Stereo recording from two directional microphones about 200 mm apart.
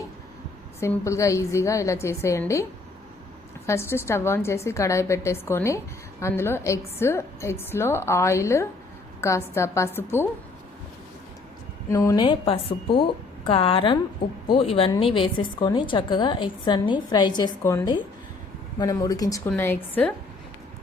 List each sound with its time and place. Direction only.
0.8 s a woman's voice: 15° left (ahead or behind)
3.7 s a woman's voice: 10° left (ahead or behind)
11.9 s a woman's voice: 15° left (ahead or behind)